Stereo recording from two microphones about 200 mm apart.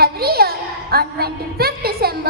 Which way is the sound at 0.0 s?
50° right (ahead or behind).